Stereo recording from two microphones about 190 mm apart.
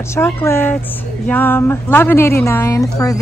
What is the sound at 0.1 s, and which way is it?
A woman's voice, 15° left (ahead or behind).